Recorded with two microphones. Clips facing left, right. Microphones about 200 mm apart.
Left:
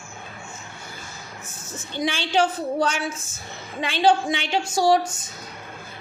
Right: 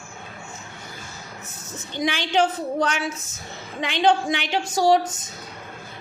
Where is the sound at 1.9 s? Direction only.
15° right (ahead or behind).